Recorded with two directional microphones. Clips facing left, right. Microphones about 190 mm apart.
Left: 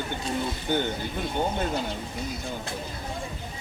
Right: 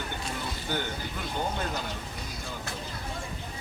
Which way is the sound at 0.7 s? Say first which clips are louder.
Left 6 dB; 25° left (ahead or behind).